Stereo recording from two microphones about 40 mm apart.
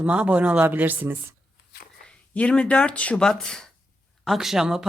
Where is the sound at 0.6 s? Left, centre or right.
Right.